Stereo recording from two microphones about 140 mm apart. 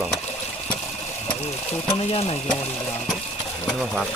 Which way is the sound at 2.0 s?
50° left (ahead or behind).